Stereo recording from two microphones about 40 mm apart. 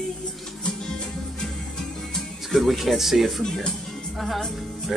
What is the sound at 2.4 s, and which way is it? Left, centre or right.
Speech, centre.